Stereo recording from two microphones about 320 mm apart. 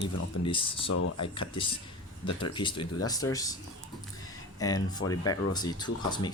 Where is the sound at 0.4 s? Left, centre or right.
Centre.